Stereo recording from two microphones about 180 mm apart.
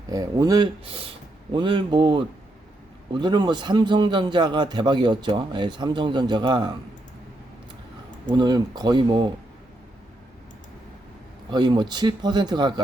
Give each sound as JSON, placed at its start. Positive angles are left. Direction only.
{"t": 0.1, "sound": "a man's voice", "side_deg": -20}
{"t": 8.3, "sound": "a man's voice", "side_deg": -25}
{"t": 11.5, "sound": "a man's voice", "side_deg": -25}